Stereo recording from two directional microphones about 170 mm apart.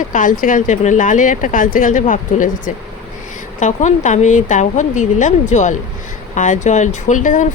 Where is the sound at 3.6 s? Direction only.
45° left (ahead or behind).